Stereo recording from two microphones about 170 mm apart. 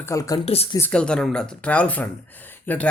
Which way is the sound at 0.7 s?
10° left (ahead or behind).